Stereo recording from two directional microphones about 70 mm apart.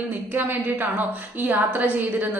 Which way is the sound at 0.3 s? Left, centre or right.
Right.